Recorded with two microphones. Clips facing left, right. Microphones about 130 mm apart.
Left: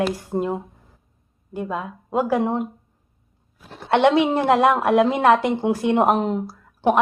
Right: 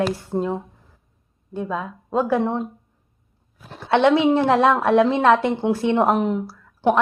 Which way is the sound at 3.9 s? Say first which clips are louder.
Right 1 dB; 15° left (ahead or behind).